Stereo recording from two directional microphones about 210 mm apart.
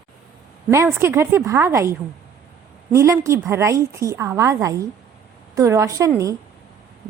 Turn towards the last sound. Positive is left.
turn(degrees=-15)  # may be behind; listen again after turning